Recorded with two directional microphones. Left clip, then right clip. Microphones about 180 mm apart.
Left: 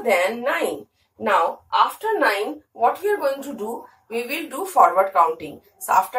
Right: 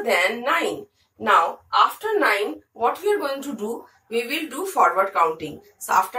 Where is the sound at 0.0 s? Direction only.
Centre (ahead or behind).